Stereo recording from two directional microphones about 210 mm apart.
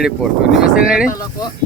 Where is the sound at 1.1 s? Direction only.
15° left (ahead or behind).